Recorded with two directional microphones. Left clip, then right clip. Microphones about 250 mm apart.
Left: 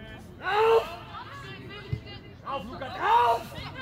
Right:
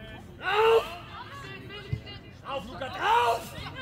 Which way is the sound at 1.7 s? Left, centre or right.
Centre.